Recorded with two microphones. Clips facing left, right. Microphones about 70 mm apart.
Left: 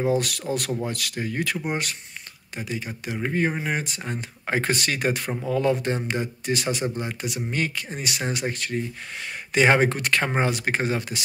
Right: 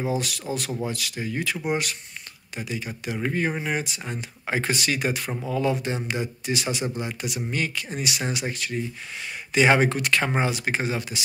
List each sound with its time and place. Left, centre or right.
0.2 s speech: left
1.7 s speech: left
3.7 s speech: left